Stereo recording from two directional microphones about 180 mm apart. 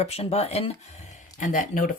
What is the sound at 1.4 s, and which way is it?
Speech, 45° left (ahead or behind).